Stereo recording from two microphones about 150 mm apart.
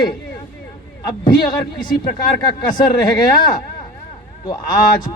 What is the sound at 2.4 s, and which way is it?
Speech, 30° left (ahead or behind).